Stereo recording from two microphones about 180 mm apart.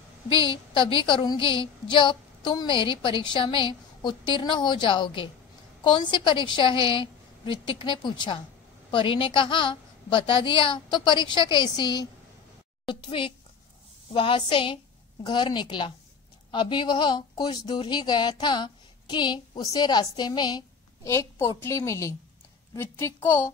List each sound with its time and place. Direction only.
0.3 s a child's voice: 30° left (ahead or behind)